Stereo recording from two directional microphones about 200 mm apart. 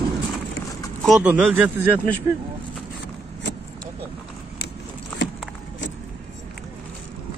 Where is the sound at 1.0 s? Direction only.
5° right (ahead or behind).